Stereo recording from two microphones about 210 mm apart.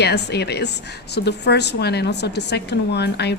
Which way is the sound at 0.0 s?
50° left (ahead or behind).